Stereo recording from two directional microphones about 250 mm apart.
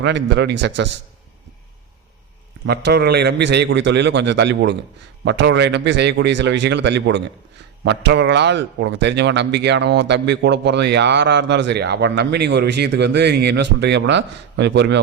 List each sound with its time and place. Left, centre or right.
0.0 s speech: right
2.6 s speech: right